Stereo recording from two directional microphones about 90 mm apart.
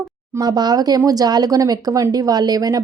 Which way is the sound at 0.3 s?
50° right (ahead or behind).